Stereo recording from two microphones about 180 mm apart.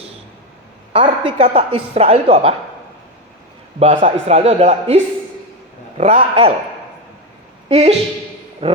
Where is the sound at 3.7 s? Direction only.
40° right (ahead or behind).